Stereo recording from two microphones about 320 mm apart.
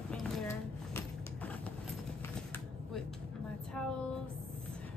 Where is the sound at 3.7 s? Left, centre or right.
Centre.